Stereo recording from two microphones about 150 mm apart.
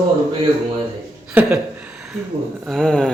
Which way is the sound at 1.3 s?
5° right (ahead or behind).